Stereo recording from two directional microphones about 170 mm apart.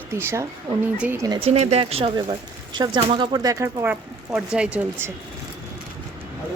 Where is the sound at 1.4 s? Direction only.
35° right (ahead or behind); by 5.1 s 10° right (ahead or behind).